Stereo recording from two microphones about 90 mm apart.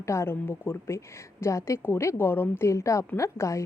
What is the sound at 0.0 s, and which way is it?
A woman's voice, 30° left (ahead or behind).